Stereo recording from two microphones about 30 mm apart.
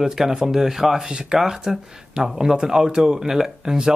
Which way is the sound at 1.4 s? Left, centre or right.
Centre.